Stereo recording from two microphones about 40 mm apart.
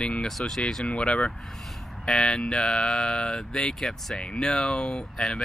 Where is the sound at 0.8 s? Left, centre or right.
Left.